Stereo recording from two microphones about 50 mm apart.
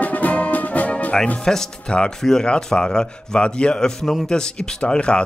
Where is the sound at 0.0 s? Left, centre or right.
Left.